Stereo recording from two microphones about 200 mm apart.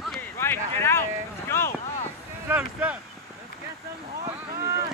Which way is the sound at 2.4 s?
5° right (ahead or behind).